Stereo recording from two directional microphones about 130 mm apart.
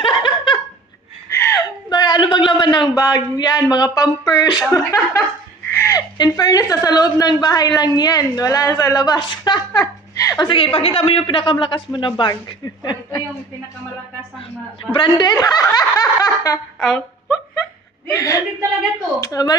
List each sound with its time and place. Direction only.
0.0 s laughter: 40° left (ahead or behind)
1.3 s whimper: 20° left (ahead or behind)
1.9 s a sound: 35° left (ahead or behind)
3.3 s a woman's voice: 30° left (ahead or behind)
10.4 s speech: 40° left (ahead or behind)
14.8 s a woman's voice: 40° left (ahead or behind)
16.8 s speech: 5° left (ahead or behind)
18.1 s a woman's voice: 25° left (ahead or behind)